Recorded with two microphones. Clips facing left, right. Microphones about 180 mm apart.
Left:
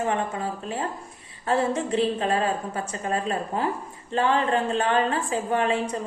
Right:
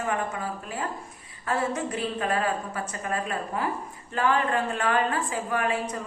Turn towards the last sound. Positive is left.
turn(degrees=25)  # may be behind; listen again after turning